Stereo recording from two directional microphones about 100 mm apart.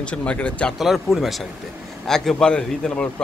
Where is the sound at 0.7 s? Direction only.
Centre (ahead or behind).